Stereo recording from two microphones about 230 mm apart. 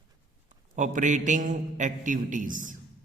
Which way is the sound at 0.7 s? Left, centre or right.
Right.